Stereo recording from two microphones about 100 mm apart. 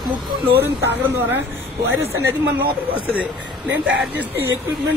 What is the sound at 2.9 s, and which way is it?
Speech, 15° right (ahead or behind).